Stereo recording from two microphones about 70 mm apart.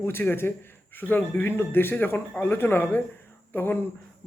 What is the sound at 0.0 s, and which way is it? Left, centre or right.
Speech, left.